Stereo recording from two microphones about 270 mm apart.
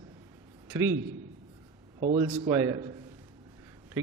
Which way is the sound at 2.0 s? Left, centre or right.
Right.